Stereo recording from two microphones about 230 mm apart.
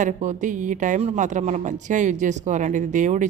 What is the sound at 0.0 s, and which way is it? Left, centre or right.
Speech, right.